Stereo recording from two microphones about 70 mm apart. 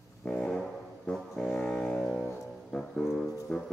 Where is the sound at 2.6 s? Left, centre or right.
Centre.